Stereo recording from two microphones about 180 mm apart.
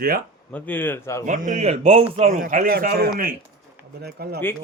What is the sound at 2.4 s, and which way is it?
A man's voice, 50° right (ahead or behind).